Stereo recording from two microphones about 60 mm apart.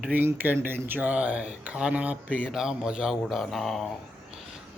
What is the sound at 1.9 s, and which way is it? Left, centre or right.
Speech, right.